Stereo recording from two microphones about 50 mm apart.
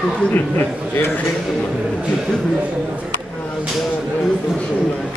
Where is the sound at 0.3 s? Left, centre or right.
Left.